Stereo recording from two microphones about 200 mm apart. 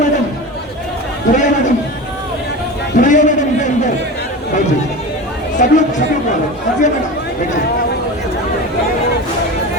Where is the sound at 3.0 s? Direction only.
40° left (ahead or behind).